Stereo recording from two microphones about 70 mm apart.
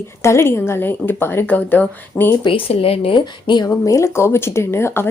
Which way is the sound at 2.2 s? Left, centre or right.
Left.